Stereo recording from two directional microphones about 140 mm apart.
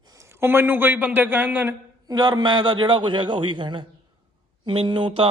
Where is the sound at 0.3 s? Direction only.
15° right (ahead or behind).